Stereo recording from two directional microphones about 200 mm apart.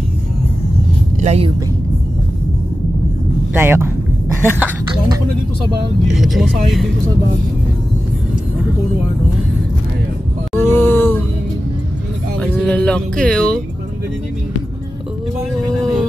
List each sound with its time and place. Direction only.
1.2 s speech: 30° right (ahead or behind)
3.5 s a woman's voice: 10° right (ahead or behind)
6.1 s speech: centre (ahead or behind)
10.6 s a sound: 10° left (ahead or behind)
12.4 s music: 5° left (ahead or behind)